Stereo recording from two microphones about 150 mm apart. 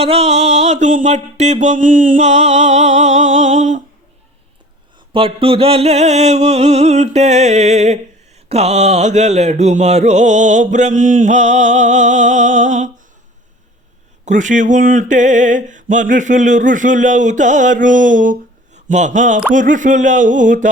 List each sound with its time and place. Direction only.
0.0 s mantra: 45° right (ahead or behind)
5.1 s mantra: 40° right (ahead or behind); by 12.9 s 55° right (ahead or behind)
14.3 s a sound: 55° right (ahead or behind)